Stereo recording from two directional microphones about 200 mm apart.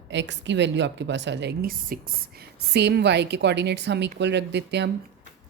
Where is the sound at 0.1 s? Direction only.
60° right (ahead or behind).